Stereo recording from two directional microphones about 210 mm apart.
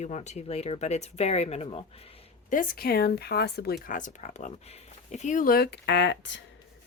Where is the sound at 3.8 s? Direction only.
40° left (ahead or behind); by 6.4 s 60° left (ahead or behind).